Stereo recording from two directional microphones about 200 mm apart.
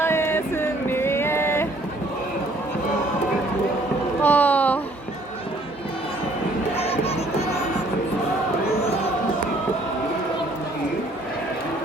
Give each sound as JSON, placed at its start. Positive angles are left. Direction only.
{"t": 0.0, "sound": "a sound", "side_deg": 10}
{"t": 4.2, "sound": "boat", "side_deg": 10}
{"t": 6.7, "sound": "music", "side_deg": 30}